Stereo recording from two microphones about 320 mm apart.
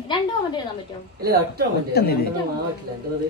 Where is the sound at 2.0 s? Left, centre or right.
Left.